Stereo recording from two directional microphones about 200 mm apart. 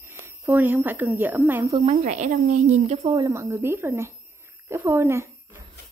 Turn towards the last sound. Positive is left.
turn(degrees=-15)  # may be behind; listen again after turning